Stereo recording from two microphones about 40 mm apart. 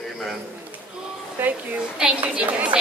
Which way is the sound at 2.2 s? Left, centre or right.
Right.